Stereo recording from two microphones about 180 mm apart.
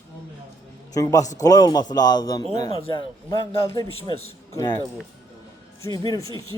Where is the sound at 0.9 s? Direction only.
20° left (ahead or behind).